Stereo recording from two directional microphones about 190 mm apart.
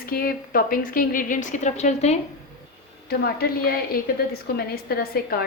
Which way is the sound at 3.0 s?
55° left (ahead or behind).